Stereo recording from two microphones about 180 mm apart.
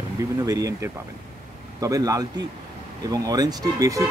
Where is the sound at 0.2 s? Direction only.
20° right (ahead or behind).